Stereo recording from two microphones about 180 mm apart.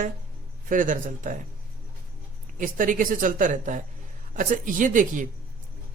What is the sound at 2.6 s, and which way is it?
Speech, 45° right (ahead or behind).